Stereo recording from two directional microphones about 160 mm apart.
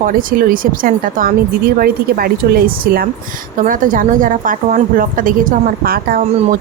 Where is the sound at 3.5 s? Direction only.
55° right (ahead or behind).